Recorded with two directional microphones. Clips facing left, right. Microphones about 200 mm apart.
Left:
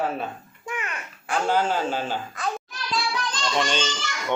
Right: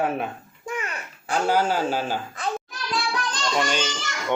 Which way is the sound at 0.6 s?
45° right (ahead or behind).